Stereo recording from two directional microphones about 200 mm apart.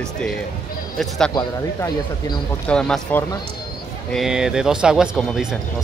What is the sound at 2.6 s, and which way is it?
Speech, 5° left (ahead or behind).